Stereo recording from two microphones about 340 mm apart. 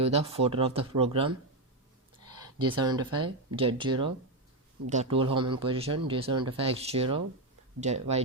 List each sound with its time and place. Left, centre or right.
0.0 s speech: centre
2.4 s speech: centre